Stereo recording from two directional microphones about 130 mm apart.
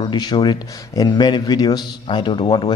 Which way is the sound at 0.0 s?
35° left (ahead or behind).